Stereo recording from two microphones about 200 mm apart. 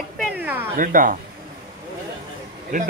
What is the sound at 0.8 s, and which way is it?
Speech, 40° right (ahead or behind).